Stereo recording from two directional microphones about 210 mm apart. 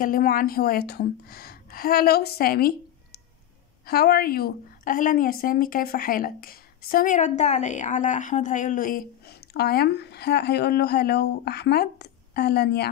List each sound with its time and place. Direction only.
0.0 s a woman's voice: 40° left (ahead or behind)